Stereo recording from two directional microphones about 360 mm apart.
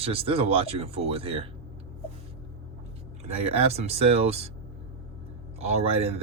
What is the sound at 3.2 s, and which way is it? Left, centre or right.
Speech, centre.